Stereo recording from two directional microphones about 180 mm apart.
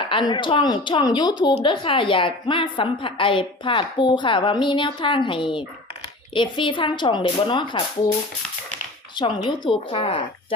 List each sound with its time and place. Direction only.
0.1 s speech: 25° left (ahead or behind)
9.1 s speech: 25° left (ahead or behind)